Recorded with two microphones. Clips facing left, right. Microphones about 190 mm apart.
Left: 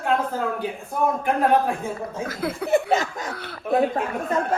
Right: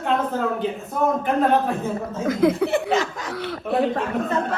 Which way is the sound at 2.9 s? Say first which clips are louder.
Right 1 dB; 40° left (ahead or behind).